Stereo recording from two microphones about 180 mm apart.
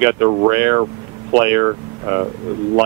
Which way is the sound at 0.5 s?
15° right (ahead or behind).